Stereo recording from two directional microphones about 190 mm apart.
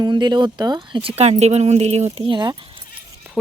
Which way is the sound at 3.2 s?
10° right (ahead or behind).